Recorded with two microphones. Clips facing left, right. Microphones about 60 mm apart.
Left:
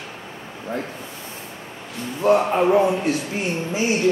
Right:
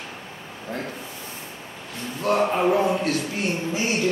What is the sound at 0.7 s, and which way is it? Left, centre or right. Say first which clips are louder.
Speech: left 4 dB; left.